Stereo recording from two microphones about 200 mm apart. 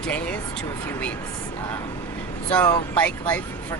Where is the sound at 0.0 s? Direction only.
5° left (ahead or behind).